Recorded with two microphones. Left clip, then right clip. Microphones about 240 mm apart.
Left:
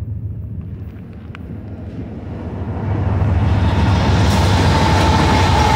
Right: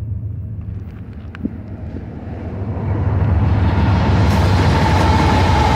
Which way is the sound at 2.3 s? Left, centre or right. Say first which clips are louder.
Even; left.